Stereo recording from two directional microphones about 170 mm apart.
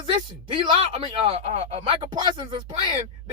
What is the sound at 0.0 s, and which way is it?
Speech, 30° right (ahead or behind).